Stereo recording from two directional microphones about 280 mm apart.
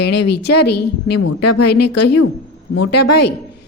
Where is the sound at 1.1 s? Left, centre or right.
Left.